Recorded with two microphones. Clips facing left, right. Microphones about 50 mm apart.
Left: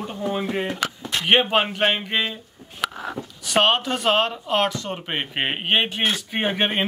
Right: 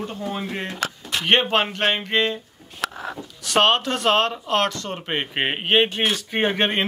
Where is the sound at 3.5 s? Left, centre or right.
Centre.